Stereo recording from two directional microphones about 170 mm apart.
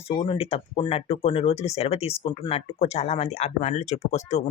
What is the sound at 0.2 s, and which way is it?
Speech, 35° left (ahead or behind).